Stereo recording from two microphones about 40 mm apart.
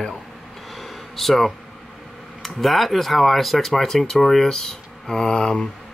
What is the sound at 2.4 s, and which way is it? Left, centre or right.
Speech, centre.